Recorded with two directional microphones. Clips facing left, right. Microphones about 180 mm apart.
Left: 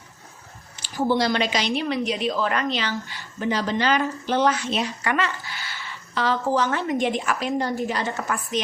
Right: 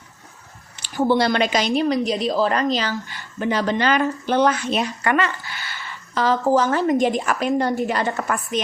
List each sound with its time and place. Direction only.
0.8 s a woman's voice: 60° right (ahead or behind); by 2.9 s 40° right (ahead or behind)
3.4 s a woman's voice: 60° right (ahead or behind)